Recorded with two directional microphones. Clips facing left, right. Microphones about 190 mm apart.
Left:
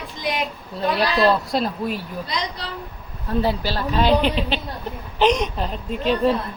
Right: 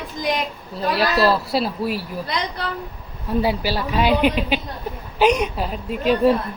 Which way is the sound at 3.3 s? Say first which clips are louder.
Right 1 dB; 10° right (ahead or behind).